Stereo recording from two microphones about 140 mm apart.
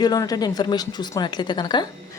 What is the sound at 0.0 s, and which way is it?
A woman's voice, 30° left (ahead or behind).